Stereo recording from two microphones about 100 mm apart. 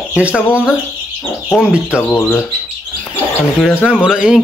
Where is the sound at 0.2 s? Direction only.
10° right (ahead or behind).